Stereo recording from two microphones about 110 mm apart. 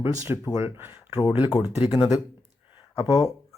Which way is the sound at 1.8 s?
50° left (ahead or behind).